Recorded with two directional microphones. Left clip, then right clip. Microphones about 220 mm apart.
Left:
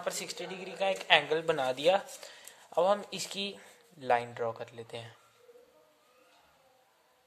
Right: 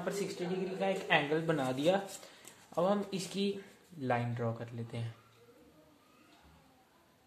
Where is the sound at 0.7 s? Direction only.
50° left (ahead or behind).